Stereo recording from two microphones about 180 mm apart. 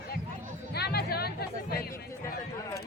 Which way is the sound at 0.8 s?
60° left (ahead or behind).